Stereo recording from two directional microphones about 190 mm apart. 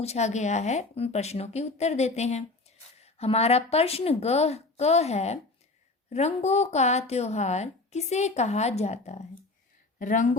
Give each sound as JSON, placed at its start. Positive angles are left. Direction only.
{"t": 0.0, "sound": "a woman's voice", "side_deg": 35}